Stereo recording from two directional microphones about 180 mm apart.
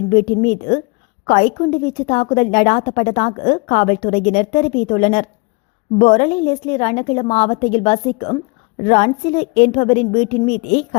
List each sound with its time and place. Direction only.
0.1 s a woman's voice: 40° left (ahead or behind)